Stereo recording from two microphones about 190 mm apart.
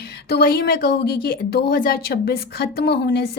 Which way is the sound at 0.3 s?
55° left (ahead or behind).